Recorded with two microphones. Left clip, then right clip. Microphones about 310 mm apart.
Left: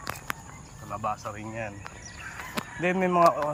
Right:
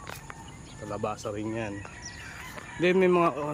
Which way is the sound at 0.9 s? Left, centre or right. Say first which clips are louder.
Left 1 dB; centre.